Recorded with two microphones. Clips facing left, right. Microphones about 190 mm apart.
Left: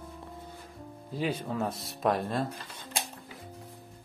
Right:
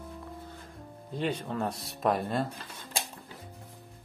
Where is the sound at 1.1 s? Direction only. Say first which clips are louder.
Even; 5° left (ahead or behind).